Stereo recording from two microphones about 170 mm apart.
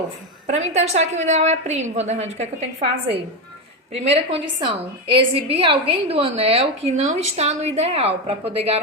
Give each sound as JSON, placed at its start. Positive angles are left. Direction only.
{"t": 0.4, "sound": "a woman's voice", "side_deg": -40}